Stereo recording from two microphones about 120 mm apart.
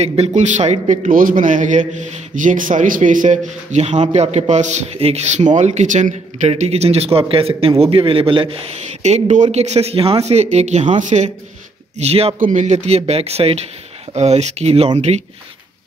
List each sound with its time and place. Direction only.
0.0 s a man's voice: 60° right (ahead or behind); by 6.5 s 85° right
6.5 s a man's voice: 60° right (ahead or behind)
9.0 s speech: 75° right (ahead or behind)
11.0 s speech: 90° right
12.0 s speech: 55° right (ahead or behind)
12.4 s speech: 85° right; by 15.2 s 65° right (ahead or behind)